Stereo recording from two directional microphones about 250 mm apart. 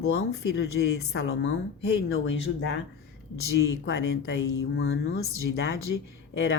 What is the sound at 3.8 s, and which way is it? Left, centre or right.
A woman's voice, left.